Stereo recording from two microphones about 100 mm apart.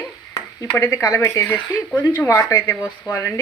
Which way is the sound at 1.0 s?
30° left (ahead or behind).